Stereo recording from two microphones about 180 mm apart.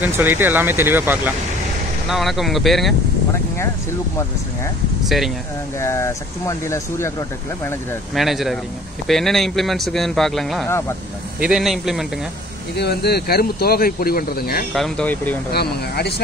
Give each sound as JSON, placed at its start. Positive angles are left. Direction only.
{"t": 0.0, "sound": "speech", "side_deg": -10}
{"t": 5.0, "sound": "speech", "side_deg": 0}
{"t": 5.8, "sound": "speech", "side_deg": 15}
{"t": 8.1, "sound": "speech", "side_deg": 0}
{"t": 12.7, "sound": "speech", "side_deg": 65}
{"t": 14.7, "sound": "speech", "side_deg": 5}
{"t": 15.5, "sound": "speech", "side_deg": 65}